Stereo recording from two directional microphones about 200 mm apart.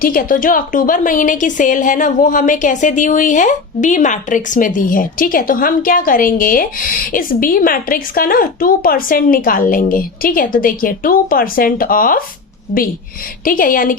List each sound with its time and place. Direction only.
0.0 s a woman's voice: 45° left (ahead or behind)
13.4 s a woman's voice: 45° left (ahead or behind)